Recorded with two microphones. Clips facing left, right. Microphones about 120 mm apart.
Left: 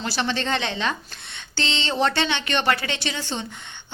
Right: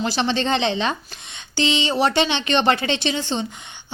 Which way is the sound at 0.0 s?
20° right (ahead or behind).